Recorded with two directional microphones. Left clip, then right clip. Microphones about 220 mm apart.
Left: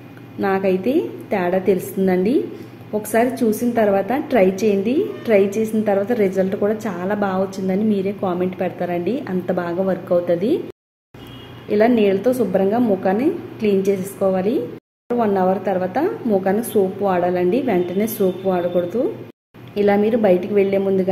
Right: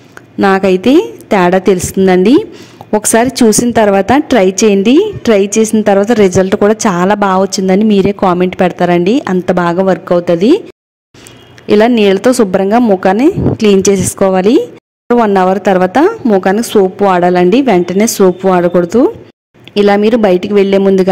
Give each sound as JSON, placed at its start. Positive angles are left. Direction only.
{"t": 0.4, "sound": "a woman's voice", "side_deg": -45}
{"t": 11.6, "sound": "a woman's voice", "side_deg": -50}